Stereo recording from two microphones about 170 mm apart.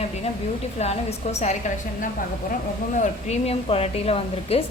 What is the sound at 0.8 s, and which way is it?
Speech, 40° left (ahead or behind).